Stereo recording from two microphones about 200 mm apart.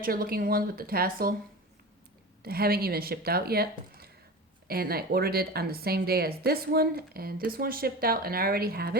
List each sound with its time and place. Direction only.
0.0 s a woman's voice: 45° right (ahead or behind)
2.4 s a woman's voice: 50° right (ahead or behind)